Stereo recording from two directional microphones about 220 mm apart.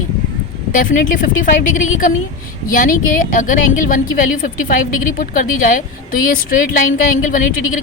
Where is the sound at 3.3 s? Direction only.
40° left (ahead or behind).